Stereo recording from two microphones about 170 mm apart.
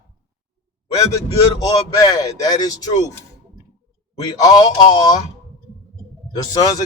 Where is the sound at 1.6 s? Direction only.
20° left (ahead or behind).